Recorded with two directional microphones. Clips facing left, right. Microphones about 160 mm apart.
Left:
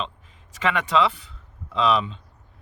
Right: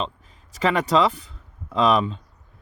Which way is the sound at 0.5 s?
35° right (ahead or behind).